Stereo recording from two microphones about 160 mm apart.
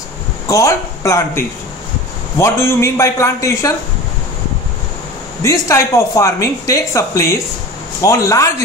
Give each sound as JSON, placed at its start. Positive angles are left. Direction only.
{"t": 0.5, "sound": "a man's voice", "side_deg": 20}
{"t": 5.4, "sound": "speech", "side_deg": 20}